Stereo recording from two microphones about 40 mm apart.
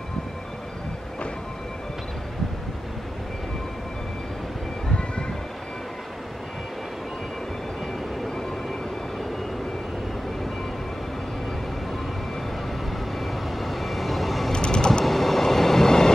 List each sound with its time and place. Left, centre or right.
13.2 s vehicle: centre
14.5 s vehicle: left
15.0 s train: centre